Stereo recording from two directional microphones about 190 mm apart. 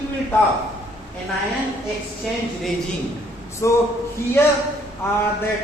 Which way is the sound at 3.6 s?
15° left (ahead or behind).